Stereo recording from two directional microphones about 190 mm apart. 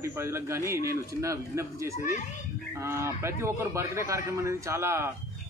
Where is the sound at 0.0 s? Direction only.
15° right (ahead or behind).